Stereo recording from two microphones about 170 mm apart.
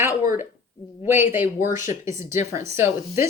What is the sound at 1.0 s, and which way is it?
Speech, 15° right (ahead or behind).